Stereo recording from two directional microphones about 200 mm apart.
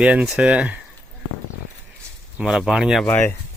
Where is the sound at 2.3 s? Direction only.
5° right (ahead or behind).